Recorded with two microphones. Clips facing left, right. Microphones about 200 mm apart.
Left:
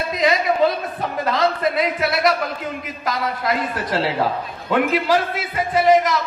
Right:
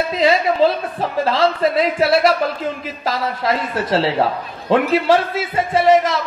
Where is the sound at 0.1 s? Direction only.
30° right (ahead or behind).